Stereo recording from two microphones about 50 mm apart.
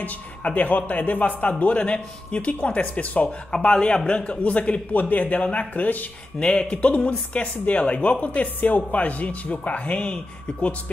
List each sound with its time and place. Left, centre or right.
0.6 s speech: left
3.5 s speech: centre
6.4 s speech: centre